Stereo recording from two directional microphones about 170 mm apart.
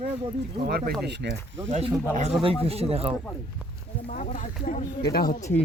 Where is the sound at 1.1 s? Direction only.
90° right.